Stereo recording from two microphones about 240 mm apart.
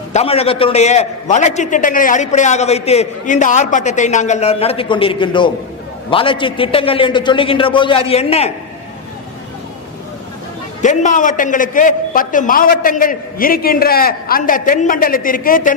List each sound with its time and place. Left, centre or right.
0.1 s a man's voice: left
10.8 s a man's voice: left